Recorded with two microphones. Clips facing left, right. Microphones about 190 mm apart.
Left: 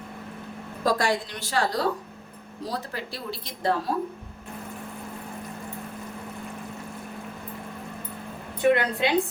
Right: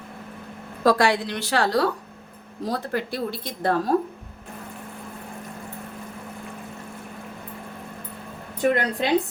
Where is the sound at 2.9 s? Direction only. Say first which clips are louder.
Right 7 dB; 55° right (ahead or behind).